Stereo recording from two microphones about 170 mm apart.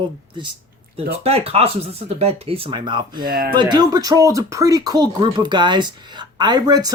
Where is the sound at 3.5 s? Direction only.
25° right (ahead or behind).